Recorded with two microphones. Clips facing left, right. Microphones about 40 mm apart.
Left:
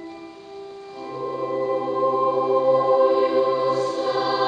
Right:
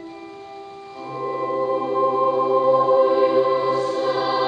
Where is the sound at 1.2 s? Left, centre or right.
Right.